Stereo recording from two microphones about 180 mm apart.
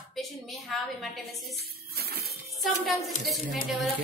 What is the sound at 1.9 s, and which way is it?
Music, 60° right (ahead or behind).